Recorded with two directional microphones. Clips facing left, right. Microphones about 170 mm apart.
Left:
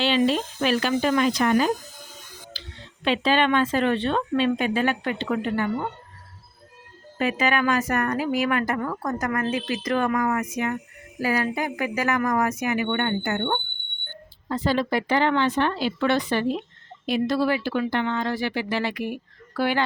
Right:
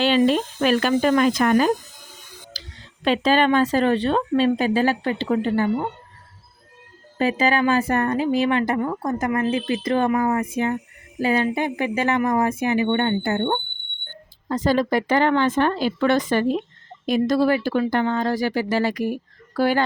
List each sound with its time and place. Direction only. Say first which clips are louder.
0.0 s speech: right 3 dB; 45° right (ahead or behind)
2.5 s a sound: even; 40° right (ahead or behind)
3.0 s speech: right 3 dB; 40° right (ahead or behind)
7.2 s a woman's voice: right 3 dB; 30° right (ahead or behind)
14.4 s speech: right 4 dB; 45° right (ahead or behind)